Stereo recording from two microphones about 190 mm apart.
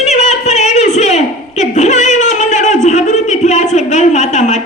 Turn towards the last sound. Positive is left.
turn(degrees=40)  # may be behind; listen again after turning